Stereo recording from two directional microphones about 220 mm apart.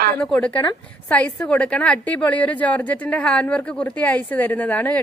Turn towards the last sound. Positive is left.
turn(degrees=5)  # may be behind; listen again after turning